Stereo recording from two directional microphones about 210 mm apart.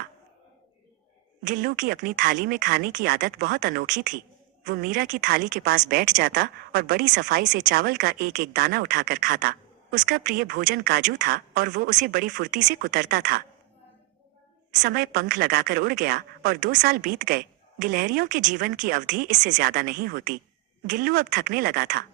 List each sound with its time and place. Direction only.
1.5 s speech: 40° right (ahead or behind)
14.8 s speech: 45° right (ahead or behind)